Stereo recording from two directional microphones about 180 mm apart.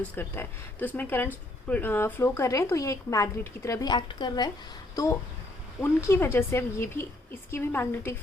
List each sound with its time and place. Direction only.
0.2 s a woman's voice: 10° left (ahead or behind)